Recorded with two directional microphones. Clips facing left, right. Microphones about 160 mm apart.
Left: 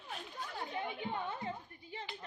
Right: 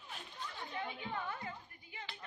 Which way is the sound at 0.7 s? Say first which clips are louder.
Left 2 dB; 25° left (ahead or behind).